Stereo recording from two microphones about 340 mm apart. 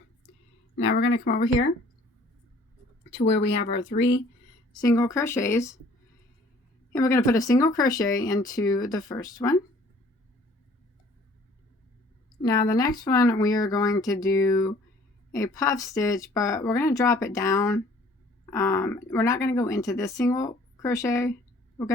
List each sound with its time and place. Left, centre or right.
0.9 s speech: left
3.1 s speech: left
4.7 s speech: centre
6.9 s speech: centre
12.4 s speech: centre